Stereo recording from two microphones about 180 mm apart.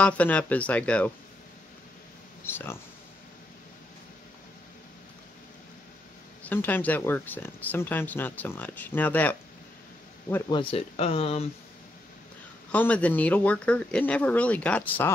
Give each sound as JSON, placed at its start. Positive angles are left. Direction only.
{"t": 0.0, "sound": "speech", "side_deg": 5}
{"t": 2.5, "sound": "speech", "side_deg": 10}
{"t": 6.4, "sound": "speech", "side_deg": 10}
{"t": 10.5, "sound": "speech", "side_deg": 30}
{"t": 12.7, "sound": "speech", "side_deg": 10}